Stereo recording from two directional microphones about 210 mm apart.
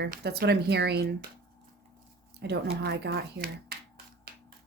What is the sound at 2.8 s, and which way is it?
Speech, 50° right (ahead or behind).